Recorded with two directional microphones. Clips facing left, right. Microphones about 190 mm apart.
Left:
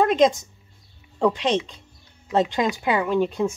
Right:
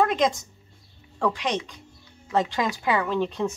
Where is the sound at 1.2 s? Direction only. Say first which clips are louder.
Left 5 dB; 25° left (ahead or behind).